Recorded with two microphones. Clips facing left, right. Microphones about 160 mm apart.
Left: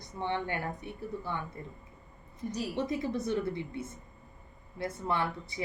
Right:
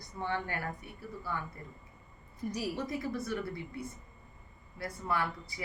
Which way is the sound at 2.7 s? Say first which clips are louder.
Left 4 dB; 20° left (ahead or behind).